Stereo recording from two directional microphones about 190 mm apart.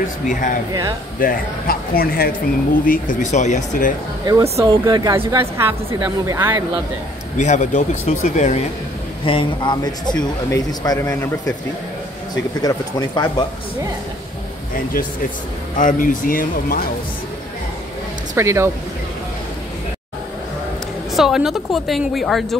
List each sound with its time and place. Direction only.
0.3 s speech: 45° left (ahead or behind)
4.3 s speech: 15° right (ahead or behind)
7.3 s speech: 40° left (ahead or behind)
9.2 s speech: 30° left (ahead or behind)
12.6 s speech: 20° left (ahead or behind)
15.8 s speech: 45° left (ahead or behind)
18.3 s speech: 15° right (ahead or behind)
21.1 s a woman's voice: centre (ahead or behind)